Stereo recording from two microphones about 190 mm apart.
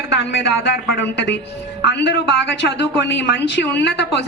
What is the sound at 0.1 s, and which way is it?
Speech, 65° left (ahead or behind).